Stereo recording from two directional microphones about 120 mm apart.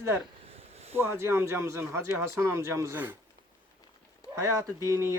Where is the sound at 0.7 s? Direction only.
60° right (ahead or behind).